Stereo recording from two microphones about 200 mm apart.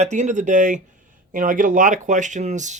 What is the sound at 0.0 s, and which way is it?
Speech, 35° right (ahead or behind).